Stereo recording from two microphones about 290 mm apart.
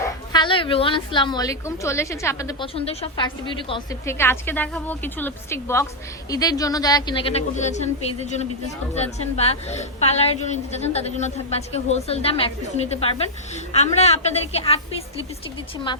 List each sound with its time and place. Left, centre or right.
0.3 s a woman's voice: centre